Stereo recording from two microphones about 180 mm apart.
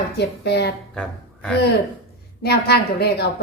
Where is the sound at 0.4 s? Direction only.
70° left (ahead or behind).